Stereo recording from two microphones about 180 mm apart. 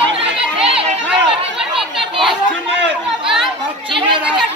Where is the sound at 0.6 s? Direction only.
30° right (ahead or behind).